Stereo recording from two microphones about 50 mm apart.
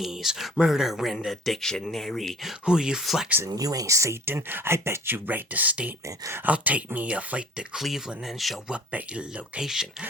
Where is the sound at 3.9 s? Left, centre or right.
Right.